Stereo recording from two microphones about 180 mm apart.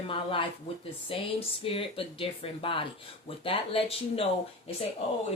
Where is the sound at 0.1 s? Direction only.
30° left (ahead or behind).